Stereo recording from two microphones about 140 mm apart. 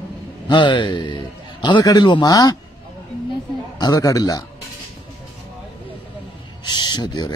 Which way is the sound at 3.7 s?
30° left (ahead or behind).